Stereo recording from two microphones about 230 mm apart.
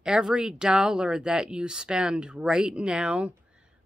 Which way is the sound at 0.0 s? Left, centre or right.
Centre.